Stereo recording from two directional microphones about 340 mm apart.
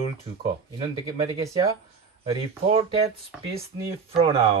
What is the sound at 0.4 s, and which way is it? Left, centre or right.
Speech, centre.